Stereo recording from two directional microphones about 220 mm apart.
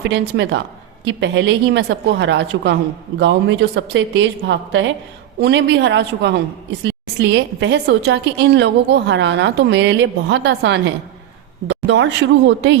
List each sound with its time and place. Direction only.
0.0 s a woman's voice: 50° right (ahead or behind)